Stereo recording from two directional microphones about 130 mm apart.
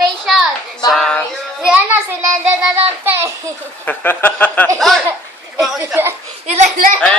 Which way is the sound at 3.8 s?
15° left (ahead or behind).